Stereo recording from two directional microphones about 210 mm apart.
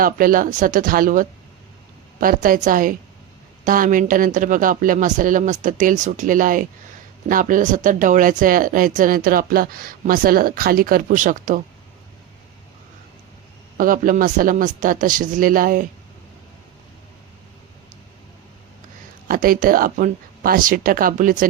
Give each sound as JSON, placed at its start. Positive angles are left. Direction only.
{"t": 0.0, "sound": "speech", "side_deg": -40}
{"t": 13.7, "sound": "speech", "side_deg": -40}
{"t": 19.3, "sound": "speech", "side_deg": -45}